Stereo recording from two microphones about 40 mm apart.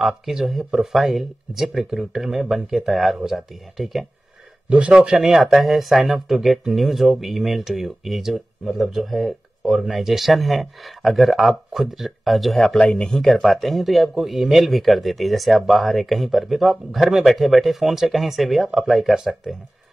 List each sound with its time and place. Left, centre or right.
0.0 s speech: centre
2.8 s speech: centre
4.6 s speech: right
5.1 s speech: centre
12.7 s speech: centre
13.4 s speech: centre